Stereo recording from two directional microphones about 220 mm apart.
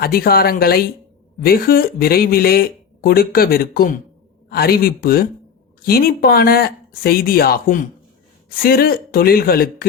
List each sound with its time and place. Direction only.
0.0 s speech: 45° left (ahead or behind)